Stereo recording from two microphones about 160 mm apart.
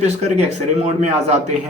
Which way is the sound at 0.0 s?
45° right (ahead or behind).